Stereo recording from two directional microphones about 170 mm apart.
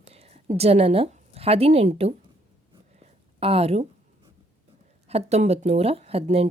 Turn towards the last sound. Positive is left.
turn(degrees=-35)  # may be behind; listen again after turning